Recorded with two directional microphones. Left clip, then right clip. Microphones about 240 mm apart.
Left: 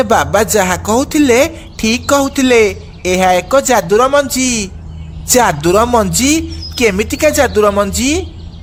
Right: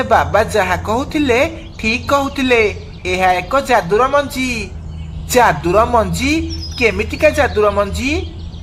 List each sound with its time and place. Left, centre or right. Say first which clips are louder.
0.0 s a woman's voice: left 2 dB; left